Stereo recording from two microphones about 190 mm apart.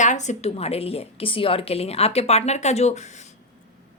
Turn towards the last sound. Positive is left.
turn(degrees=35)  # may be behind; listen again after turning